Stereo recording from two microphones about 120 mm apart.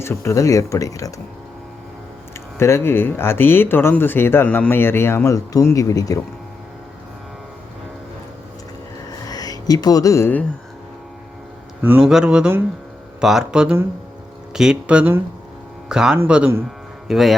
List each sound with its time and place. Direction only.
0.0 s speech: 20° left (ahead or behind)
2.6 s speech: 20° left (ahead or behind)
9.2 s speech: 30° left (ahead or behind)
11.8 s speech: 15° right (ahead or behind)
12.0 s speech: 5° right (ahead or behind)
17.1 s speech: centre (ahead or behind)